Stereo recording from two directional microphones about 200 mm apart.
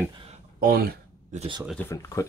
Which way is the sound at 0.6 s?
50° right (ahead or behind).